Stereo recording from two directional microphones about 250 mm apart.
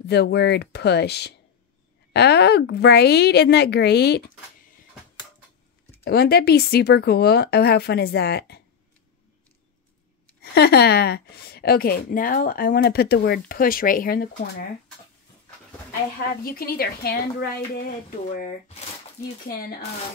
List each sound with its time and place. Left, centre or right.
0.0 s a woman's voice: left
6.0 s a woman's voice: left
10.4 s a woman's voice: left
16.4 s a woman's voice: left